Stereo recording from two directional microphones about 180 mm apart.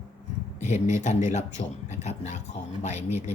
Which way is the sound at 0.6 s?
40° left (ahead or behind).